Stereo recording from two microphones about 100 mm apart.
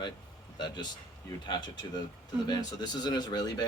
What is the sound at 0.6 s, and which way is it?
Speech, 45° left (ahead or behind).